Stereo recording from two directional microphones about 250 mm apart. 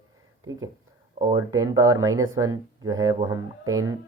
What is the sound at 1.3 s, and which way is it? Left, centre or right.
Speech, centre.